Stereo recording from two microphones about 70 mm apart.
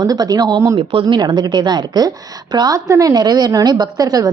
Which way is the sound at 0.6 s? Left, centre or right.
Right.